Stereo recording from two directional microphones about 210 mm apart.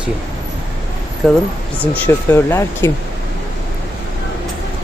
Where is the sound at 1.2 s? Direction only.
Centre (ahead or behind).